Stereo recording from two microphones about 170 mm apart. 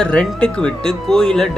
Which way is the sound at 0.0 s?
5° left (ahead or behind).